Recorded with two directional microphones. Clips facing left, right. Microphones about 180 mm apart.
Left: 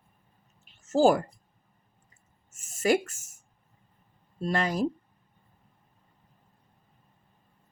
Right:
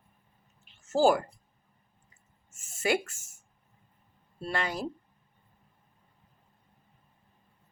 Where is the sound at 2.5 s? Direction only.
40° left (ahead or behind).